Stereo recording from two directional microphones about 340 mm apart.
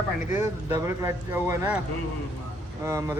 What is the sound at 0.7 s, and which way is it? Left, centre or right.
Speech, centre.